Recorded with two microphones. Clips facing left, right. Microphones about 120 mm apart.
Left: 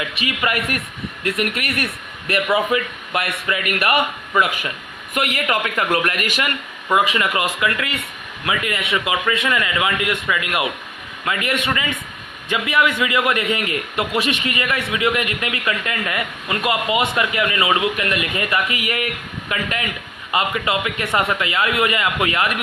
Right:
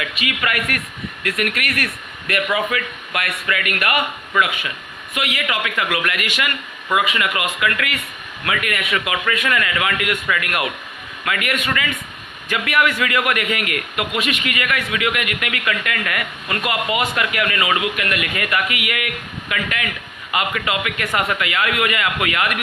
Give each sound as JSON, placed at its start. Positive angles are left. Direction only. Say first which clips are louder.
{"t": 0.0, "sound": "a man's voice", "louder": "left 1 dB", "side_deg": 25}
{"t": 5.1, "sound": "a man's voice", "louder": "left 3 dB", "side_deg": 45}